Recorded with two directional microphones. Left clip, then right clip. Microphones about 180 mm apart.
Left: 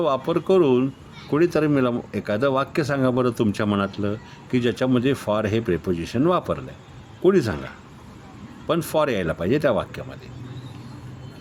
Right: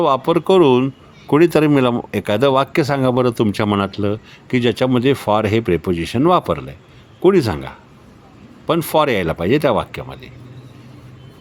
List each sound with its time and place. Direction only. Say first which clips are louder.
0.0 s speech: right 7 dB; 30° right (ahead or behind)